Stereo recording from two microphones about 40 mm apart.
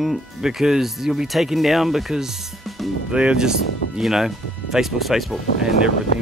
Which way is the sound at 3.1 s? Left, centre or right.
Right.